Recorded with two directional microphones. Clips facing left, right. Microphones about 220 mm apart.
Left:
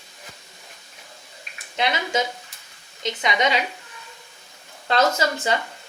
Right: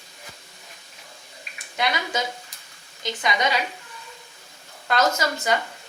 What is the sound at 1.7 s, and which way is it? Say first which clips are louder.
Speech: left 3 dB; 25° left (ahead or behind).